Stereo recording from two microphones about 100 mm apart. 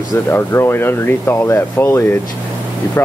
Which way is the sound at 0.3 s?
25° left (ahead or behind).